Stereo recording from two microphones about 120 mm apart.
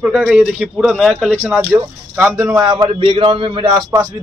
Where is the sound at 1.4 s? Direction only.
15° right (ahead or behind).